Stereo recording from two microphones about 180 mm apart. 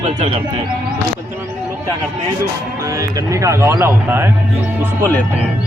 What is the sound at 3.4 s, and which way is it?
Speech, 15° right (ahead or behind).